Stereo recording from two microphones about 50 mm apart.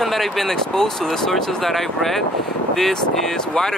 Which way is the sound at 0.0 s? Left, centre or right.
Centre.